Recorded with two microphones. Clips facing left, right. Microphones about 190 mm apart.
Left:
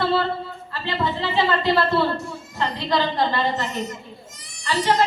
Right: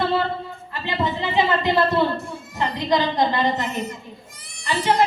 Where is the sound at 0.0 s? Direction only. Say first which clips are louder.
Even; 15° right (ahead or behind).